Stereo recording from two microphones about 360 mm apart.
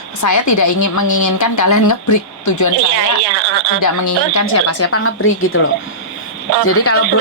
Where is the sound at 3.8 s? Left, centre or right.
Left.